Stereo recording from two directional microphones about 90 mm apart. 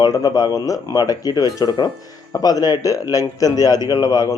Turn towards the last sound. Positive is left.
turn(degrees=50)  # may be behind; listen again after turning